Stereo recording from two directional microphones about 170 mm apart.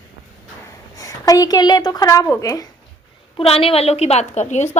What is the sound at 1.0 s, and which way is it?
A woman's voice, 20° left (ahead or behind).